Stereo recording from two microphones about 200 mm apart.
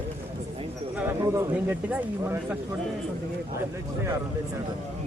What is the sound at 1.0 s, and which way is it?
Speech, 10° right (ahead or behind).